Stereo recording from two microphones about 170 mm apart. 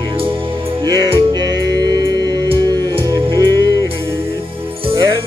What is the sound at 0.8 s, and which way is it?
Music, 25° right (ahead or behind).